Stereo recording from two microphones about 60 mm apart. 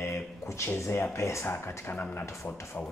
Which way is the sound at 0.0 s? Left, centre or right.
Left.